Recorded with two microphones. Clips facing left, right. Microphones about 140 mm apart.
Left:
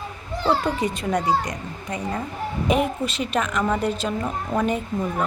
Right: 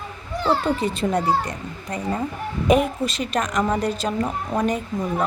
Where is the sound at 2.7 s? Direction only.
40° right (ahead or behind).